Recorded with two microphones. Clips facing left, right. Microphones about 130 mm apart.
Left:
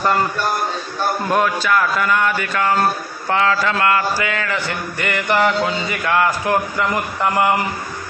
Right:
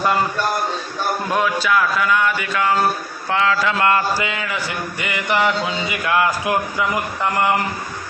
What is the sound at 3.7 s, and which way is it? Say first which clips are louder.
Speech: even; 20° right (ahead or behind).